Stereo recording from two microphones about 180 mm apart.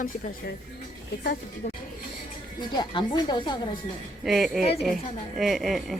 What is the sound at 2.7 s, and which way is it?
Speech, 25° left (ahead or behind).